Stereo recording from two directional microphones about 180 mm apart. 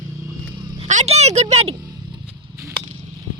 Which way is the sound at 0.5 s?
25° right (ahead or behind).